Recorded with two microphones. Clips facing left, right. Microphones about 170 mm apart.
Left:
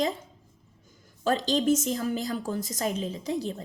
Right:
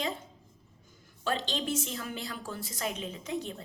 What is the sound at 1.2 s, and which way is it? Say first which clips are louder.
A woman's voice: left 9 dB; 40° left (ahead or behind).